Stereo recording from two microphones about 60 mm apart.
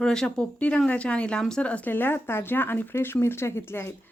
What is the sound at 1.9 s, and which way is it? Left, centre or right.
Speech, left.